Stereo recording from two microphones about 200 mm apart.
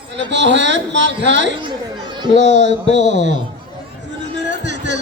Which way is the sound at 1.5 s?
25° right (ahead or behind).